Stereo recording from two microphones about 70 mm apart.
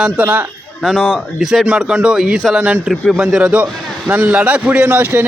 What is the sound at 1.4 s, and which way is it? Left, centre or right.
Speech, centre.